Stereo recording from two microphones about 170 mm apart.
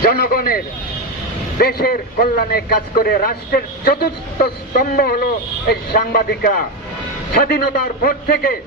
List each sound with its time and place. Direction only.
0.0 s a man's voice: 60° left (ahead or behind)